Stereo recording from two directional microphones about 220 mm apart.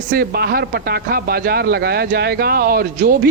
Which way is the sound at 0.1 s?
45° right (ahead or behind).